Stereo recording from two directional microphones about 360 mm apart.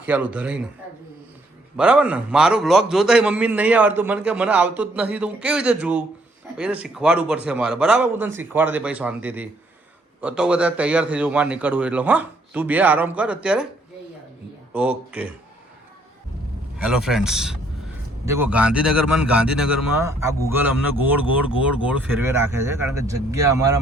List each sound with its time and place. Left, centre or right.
0.0 s a man's voice: centre
1.7 s a man's voice: centre
14.7 s a man's voice: centre
16.7 s a man's voice: centre